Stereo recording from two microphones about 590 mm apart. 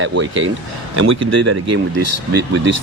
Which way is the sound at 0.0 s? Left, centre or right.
Centre.